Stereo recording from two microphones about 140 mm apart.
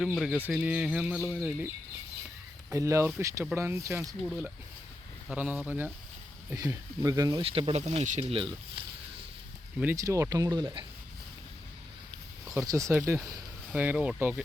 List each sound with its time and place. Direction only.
0.0 s speech: centre (ahead or behind)
2.7 s speech: 20° right (ahead or behind)
4.3 s speech: 5° right (ahead or behind); by 7.4 s 25° right (ahead or behind)
7.4 s speech: 40° right (ahead or behind)
8.3 s speech: 40° right (ahead or behind)
9.8 s speech: 20° right (ahead or behind)
12.5 s speech: 25° right (ahead or behind)
13.7 s speech: 10° right (ahead or behind)